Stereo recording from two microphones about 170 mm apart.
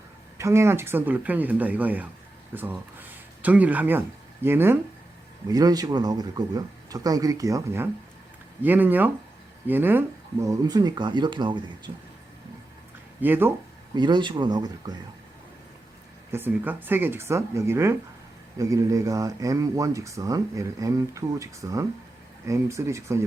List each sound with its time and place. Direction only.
0.3 s speech: 15° right (ahead or behind)
13.2 s speech: 10° right (ahead or behind)
13.9 s speech: 25° right (ahead or behind)
16.3 s speech: 10° right (ahead or behind)